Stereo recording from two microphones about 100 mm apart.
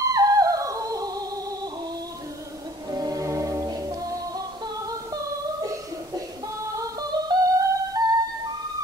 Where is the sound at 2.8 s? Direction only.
35° right (ahead or behind).